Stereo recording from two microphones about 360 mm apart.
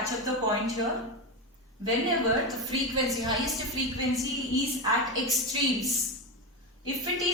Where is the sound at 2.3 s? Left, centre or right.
Centre.